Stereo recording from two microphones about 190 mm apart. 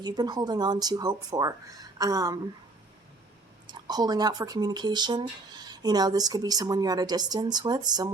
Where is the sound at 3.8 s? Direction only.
20° right (ahead or behind).